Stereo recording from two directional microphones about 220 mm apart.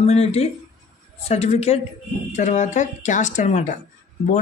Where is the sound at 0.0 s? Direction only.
30° left (ahead or behind).